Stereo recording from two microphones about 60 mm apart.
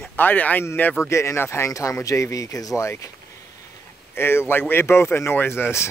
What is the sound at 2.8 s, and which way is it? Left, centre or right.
Speech, left.